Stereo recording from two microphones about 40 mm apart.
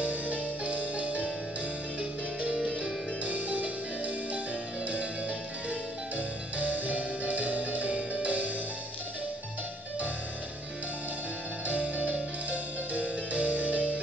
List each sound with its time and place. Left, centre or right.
0.0 s music: right
5.7 s music: right
11.6 s music: right